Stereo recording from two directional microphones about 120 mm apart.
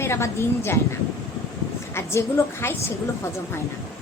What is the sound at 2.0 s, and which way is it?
Speech, 20° left (ahead or behind).